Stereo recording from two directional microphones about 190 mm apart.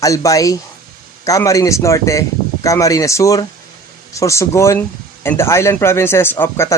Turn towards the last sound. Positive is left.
turn(degrees=10)  # may be behind; listen again after turning